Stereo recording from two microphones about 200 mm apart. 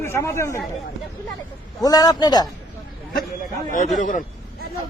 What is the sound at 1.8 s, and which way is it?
Speech, 20° left (ahead or behind).